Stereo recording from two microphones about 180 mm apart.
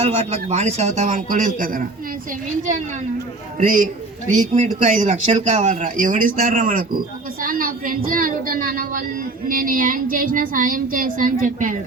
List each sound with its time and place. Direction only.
0.0 s a man's voice: 40° right (ahead or behind)
3.6 s speech: 50° right (ahead or behind)